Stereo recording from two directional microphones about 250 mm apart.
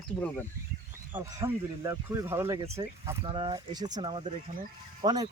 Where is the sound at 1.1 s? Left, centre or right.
Centre.